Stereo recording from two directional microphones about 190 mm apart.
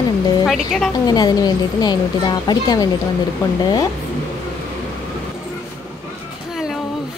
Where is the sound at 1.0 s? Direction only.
20° left (ahead or behind).